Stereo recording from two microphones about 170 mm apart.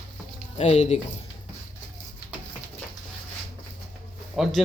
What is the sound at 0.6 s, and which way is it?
Speech, 40° left (ahead or behind).